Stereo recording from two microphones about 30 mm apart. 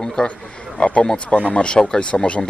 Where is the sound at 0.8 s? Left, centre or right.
Left.